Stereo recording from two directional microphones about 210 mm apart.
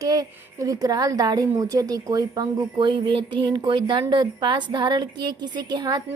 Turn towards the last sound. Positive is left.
turn(degrees=-20)  # may be behind; listen again after turning